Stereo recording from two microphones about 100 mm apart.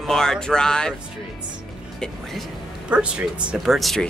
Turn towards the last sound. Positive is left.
turn(degrees=0)  # may be behind; listen again after turning